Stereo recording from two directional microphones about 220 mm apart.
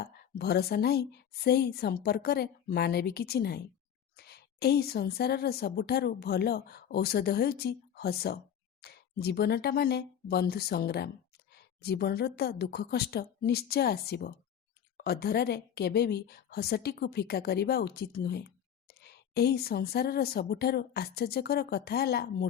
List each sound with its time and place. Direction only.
0.0 s a woman's voice: 45° left (ahead or behind)